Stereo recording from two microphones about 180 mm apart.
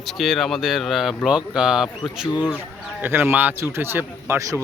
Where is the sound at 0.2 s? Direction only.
Centre (ahead or behind).